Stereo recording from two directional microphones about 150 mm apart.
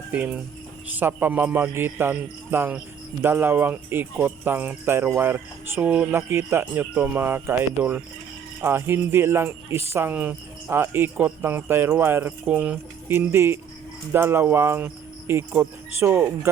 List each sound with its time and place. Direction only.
0.1 s speech: 10° right (ahead or behind)